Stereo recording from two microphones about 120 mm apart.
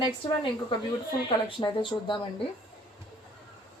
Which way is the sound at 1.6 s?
40° left (ahead or behind).